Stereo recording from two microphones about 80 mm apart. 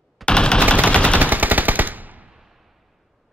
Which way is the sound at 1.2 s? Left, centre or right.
Right.